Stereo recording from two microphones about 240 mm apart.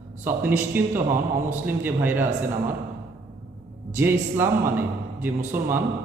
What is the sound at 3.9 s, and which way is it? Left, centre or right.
A man's voice, centre.